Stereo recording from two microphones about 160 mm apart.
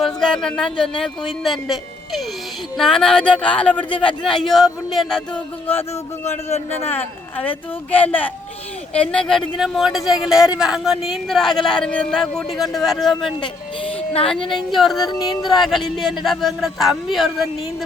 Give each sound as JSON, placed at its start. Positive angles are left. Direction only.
{"t": 0.0, "sound": "speech", "side_deg": 5}
{"t": 6.9, "sound": "speech", "side_deg": 10}
{"t": 13.8, "sound": "music", "side_deg": 35}
{"t": 14.5, "sound": "speech", "side_deg": 0}